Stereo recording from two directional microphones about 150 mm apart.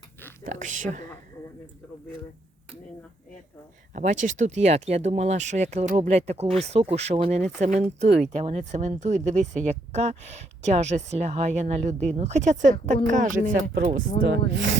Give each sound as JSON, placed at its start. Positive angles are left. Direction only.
{"t": 0.4, "sound": "speech", "side_deg": -55}
{"t": 3.9, "sound": "speech", "side_deg": -55}